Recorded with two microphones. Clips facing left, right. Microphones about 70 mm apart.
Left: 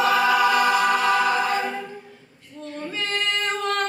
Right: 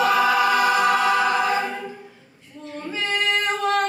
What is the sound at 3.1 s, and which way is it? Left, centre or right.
Female singing, centre.